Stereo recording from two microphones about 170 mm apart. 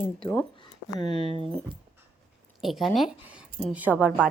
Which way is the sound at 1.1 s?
35° right (ahead or behind).